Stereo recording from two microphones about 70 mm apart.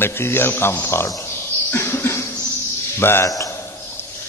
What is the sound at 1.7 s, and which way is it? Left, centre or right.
Cough, left.